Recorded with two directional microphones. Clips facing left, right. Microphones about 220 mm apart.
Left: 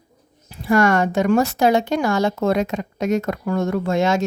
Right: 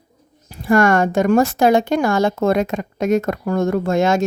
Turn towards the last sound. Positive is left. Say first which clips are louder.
# right 2 dB
turn(degrees=-50)  # may be behind; listen again after turning